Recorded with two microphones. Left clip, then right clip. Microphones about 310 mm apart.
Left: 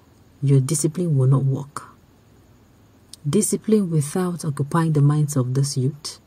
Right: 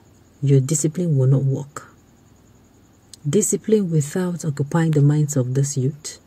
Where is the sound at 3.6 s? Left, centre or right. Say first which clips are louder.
Right 2 dB; left.